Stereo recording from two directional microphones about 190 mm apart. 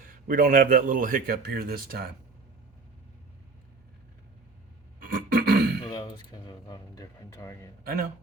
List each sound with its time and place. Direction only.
0.0 s a man's voice: 50° right (ahead or behind)
4.9 s a sound: 50° right (ahead or behind)
5.8 s speech: 25° left (ahead or behind)
7.9 s a man's voice: 50° right (ahead or behind)